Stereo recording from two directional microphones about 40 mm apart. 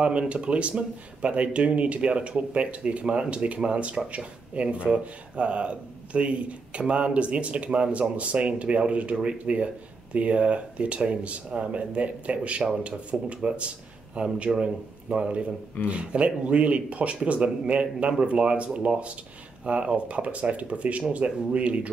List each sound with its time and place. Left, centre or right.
0.0 s speech: right